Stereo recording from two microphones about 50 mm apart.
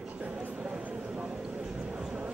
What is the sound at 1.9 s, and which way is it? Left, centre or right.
Vehicle, centre.